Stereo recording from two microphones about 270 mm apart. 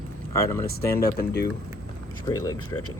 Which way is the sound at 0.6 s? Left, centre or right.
Left.